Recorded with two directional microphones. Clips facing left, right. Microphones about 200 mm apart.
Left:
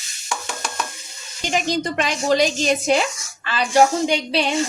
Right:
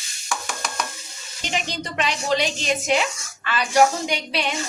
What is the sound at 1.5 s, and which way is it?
A woman's voice, 45° left (ahead or behind).